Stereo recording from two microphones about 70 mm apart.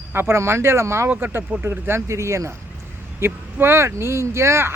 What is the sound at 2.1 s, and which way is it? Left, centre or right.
Speech, right.